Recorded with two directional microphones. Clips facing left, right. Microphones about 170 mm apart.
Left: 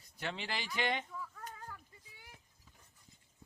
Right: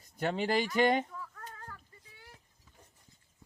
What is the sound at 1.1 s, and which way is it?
Chicken, 10° left (ahead or behind).